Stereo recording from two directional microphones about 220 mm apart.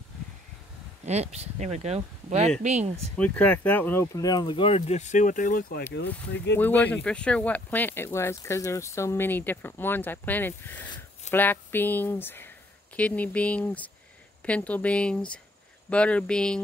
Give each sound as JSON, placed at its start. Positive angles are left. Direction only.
{"t": 1.0, "sound": "speech", "side_deg": -30}
{"t": 3.2, "sound": "speech", "side_deg": 5}
{"t": 5.9, "sound": "speech", "side_deg": 50}
{"t": 6.6, "sound": "speech", "side_deg": 5}